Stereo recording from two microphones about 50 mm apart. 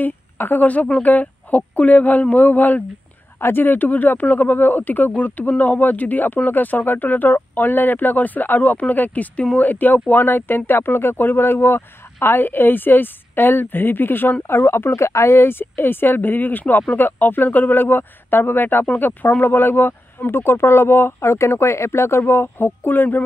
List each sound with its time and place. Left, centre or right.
0.0 s speech: left
3.3 s speech: left
15.0 s speech: left
21.5 s speech: left